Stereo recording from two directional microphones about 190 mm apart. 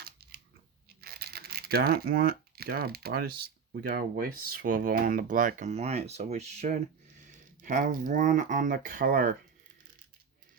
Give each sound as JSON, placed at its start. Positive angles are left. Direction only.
{"t": 0.0, "sound": "biting", "side_deg": -55}
{"t": 1.0, "sound": "a sound", "side_deg": -55}
{"t": 3.7, "sound": "speech", "side_deg": -55}